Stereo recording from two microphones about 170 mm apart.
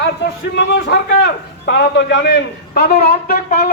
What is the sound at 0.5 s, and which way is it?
A man's voice, 90° left.